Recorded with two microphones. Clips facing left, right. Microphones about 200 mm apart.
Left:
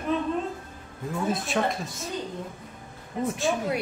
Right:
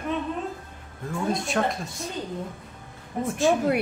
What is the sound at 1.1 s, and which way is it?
Speech, centre (ahead or behind).